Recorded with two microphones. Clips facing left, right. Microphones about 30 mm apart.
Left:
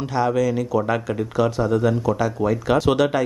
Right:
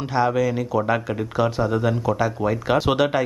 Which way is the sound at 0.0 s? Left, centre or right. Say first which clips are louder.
Even; centre.